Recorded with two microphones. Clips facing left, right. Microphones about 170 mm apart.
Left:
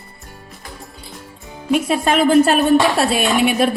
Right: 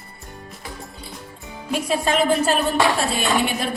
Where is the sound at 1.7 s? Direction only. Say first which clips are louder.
Left 5 dB; 60° left (ahead or behind).